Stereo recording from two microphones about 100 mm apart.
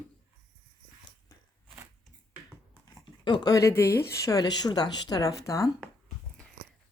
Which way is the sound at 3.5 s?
25° left (ahead or behind).